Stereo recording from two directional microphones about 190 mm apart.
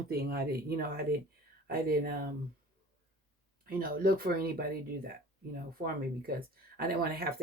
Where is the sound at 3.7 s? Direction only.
50° right (ahead or behind).